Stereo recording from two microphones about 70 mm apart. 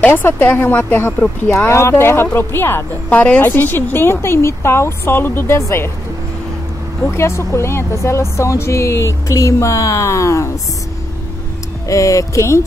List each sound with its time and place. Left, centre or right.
0.0 s speech: left
1.7 s speech: left
7.1 s speech: left
11.9 s speech: left